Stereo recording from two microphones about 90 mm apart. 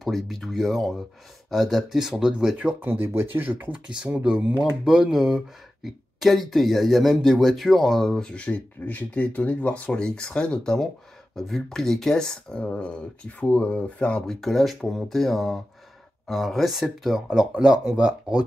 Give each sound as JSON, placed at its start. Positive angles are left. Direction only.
{"t": 0.0, "sound": "speech", "side_deg": 0}
{"t": 2.8, "sound": "speech", "side_deg": -25}